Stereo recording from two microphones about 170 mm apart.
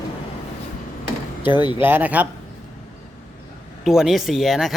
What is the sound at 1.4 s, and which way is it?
Speech, 25° left (ahead or behind).